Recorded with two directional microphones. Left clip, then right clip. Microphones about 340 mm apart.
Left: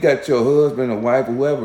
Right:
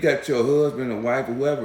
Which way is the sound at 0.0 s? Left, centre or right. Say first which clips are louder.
Left 5 dB; centre.